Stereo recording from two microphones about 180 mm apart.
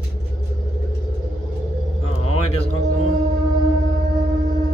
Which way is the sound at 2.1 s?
30° left (ahead or behind).